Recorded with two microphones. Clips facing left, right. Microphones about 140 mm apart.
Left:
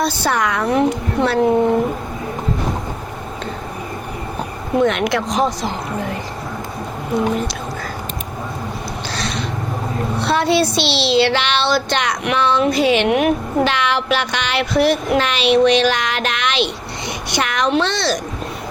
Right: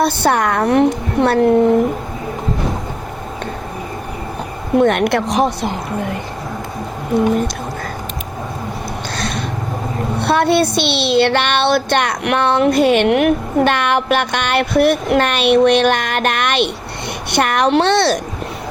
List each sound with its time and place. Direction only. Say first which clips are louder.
0.0 s a woman's voice: right 4 dB; 55° right (ahead or behind)
4.8 s a woman's voice: right 3 dB; 55° right (ahead or behind)
9.1 s a sound: right 1 dB; 50° right (ahead or behind)
10.2 s a woman's voice: right 2 dB; 55° right (ahead or behind)